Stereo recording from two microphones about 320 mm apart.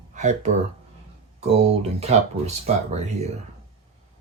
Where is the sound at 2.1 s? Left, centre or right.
Centre.